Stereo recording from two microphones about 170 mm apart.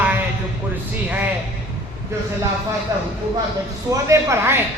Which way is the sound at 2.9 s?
20° right (ahead or behind).